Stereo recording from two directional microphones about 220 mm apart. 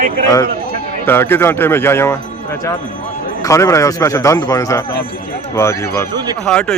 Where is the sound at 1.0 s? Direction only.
10° left (ahead or behind).